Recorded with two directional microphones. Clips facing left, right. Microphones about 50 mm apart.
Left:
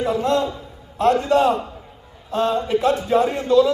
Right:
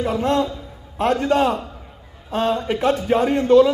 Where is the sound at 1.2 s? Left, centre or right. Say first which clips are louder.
Left 1 dB; right.